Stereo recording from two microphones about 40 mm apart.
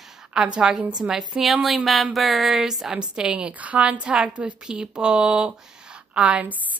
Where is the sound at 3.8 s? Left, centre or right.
Right.